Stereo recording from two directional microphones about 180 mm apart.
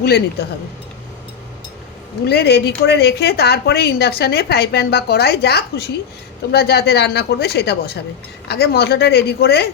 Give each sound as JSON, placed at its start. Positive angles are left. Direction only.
{"t": 0.0, "sound": "speech", "side_deg": 65}
{"t": 2.2, "sound": "speech", "side_deg": 65}